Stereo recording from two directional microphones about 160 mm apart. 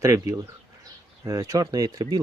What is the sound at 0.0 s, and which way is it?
Speech, 20° right (ahead or behind).